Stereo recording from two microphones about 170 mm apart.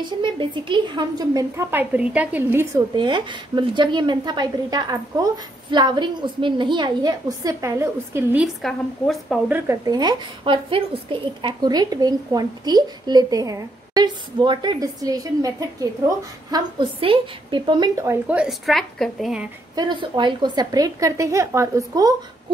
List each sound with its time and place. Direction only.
0.0 s a woman's voice: 30° right (ahead or behind); by 8.5 s 10° right (ahead or behind)
8.6 s a woman's voice: centre (ahead or behind)
9.5 s a woman's voice: 20° right (ahead or behind); by 19.5 s 5° right (ahead or behind)
19.7 s a woman's voice: 25° right (ahead or behind)